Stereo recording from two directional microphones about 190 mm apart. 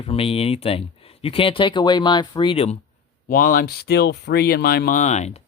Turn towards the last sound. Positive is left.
turn(degrees=35)  # may be behind; listen again after turning